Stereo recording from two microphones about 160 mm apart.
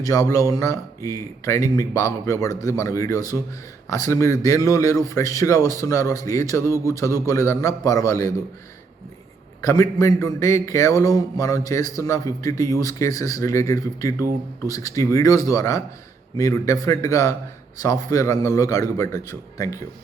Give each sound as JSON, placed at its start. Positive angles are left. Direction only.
{"t": 0.0, "sound": "a man's voice", "side_deg": 20}
{"t": 9.6, "sound": "a man's voice", "side_deg": 20}